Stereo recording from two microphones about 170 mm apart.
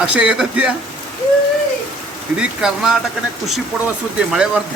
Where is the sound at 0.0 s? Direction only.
5° right (ahead or behind).